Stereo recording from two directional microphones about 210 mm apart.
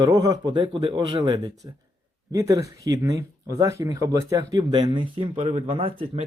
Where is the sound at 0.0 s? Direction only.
20° right (ahead or behind).